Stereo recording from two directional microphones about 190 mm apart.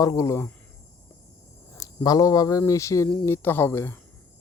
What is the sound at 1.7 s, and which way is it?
Speech, 20° left (ahead or behind).